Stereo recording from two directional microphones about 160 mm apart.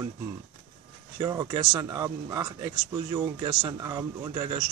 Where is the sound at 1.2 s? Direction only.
20° right (ahead or behind).